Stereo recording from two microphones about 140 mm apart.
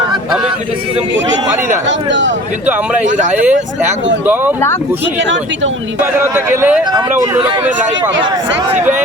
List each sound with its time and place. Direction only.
3.0 s speech: 60° right (ahead or behind)
6.0 s a man's voice: 15° right (ahead or behind)
6.9 s speech: 30° right (ahead or behind)
7.6 s a man's voice: 15° right (ahead or behind)